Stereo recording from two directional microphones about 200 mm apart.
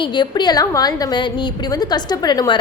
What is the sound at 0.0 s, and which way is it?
A woman's voice, 20° left (ahead or behind).